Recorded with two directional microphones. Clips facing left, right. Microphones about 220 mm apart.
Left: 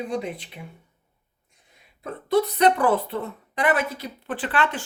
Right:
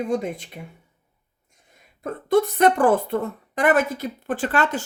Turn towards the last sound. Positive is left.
turn(degrees=-45)  # may be behind; listen again after turning